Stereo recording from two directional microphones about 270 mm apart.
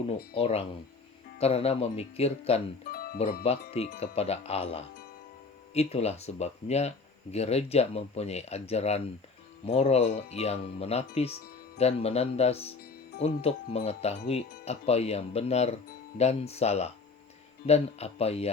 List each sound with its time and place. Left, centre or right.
0.3 s speech: left
2.9 s music: left
3.4 s speech: left